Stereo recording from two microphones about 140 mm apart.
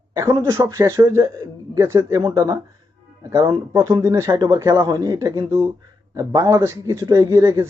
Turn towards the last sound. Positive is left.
turn(degrees=-20)  # may be behind; listen again after turning